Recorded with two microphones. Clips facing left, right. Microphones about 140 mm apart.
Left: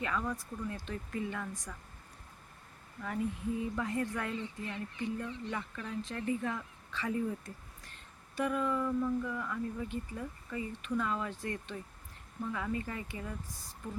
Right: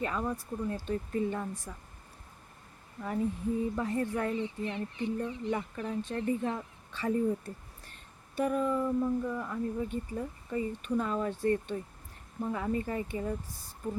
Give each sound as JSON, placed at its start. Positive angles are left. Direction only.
{"t": 0.0, "sound": "speech", "side_deg": -30}
{"t": 3.0, "sound": "speech", "side_deg": -30}